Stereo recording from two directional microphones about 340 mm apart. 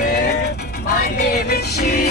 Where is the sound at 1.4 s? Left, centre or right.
Left.